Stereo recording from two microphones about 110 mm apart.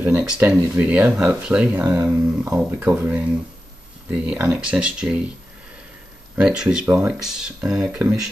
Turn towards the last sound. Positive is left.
turn(degrees=-10)  # may be behind; listen again after turning